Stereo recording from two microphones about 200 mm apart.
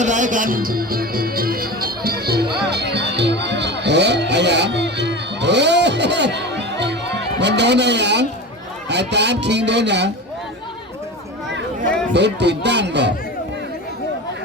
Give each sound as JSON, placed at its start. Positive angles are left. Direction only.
{"t": 0.0, "sound": "music", "side_deg": -40}
{"t": 8.9, "sound": "speech", "side_deg": -60}
{"t": 12.1, "sound": "speech", "side_deg": -60}